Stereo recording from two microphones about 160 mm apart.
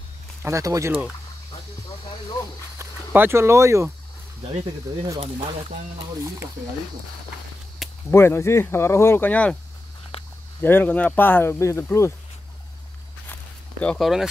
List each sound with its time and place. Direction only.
0.4 s speech: 20° right (ahead or behind)
2.8 s speech: 15° right (ahead or behind)
8.1 s speech: 15° left (ahead or behind)
10.1 s a sound: 35° left (ahead or behind)
10.6 s speech: 10° left (ahead or behind)
13.3 s zipper: 5° left (ahead or behind)